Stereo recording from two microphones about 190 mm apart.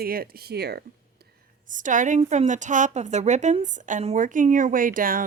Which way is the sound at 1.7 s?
40° right (ahead or behind).